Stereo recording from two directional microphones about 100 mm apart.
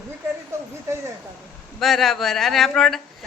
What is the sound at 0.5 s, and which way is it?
Speech, 25° right (ahead or behind).